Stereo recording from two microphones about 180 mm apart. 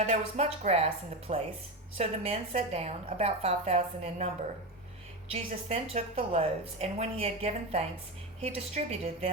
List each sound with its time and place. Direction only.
0.0 s a woman's voice: 35° right (ahead or behind)
5.3 s a woman's voice: 35° right (ahead or behind)